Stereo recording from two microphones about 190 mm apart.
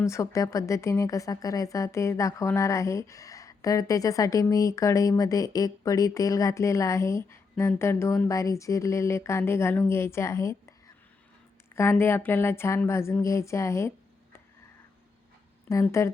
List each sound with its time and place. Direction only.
0.0 s speech: 15° left (ahead or behind)
15.7 s speech: 15° left (ahead or behind)